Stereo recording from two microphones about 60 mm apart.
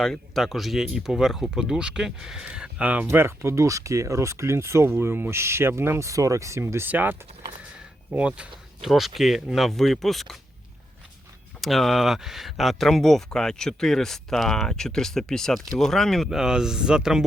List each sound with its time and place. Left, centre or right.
0.0 s speech: centre; by 3.1 s right
3.1 s speech: right
6.1 s speech: right
6.8 s speech: right
8.1 s speech: centre
8.8 s speech: centre
11.6 s speech: centre
16.3 s speech: centre